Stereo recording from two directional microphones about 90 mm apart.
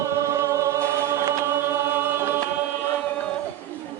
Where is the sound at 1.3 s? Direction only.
30° right (ahead or behind).